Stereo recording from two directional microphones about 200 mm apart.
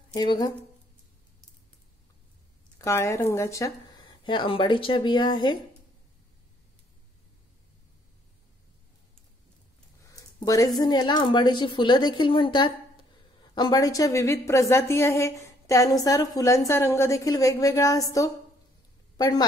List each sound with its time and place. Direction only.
0.1 s a woman's voice: 20° left (ahead or behind)
2.8 s a woman's voice: 15° left (ahead or behind)
10.1 s a sound: 15° left (ahead or behind)
10.8 s a woman's voice: 20° left (ahead or behind)